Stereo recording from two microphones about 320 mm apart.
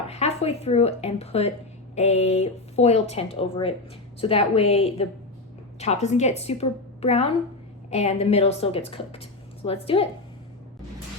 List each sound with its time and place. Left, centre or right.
0.1 s a woman's voice: centre